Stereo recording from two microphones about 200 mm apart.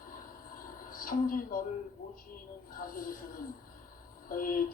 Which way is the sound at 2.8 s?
45° left (ahead or behind).